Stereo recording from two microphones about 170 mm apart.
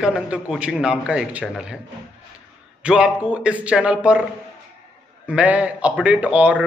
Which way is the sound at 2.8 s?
5° right (ahead or behind).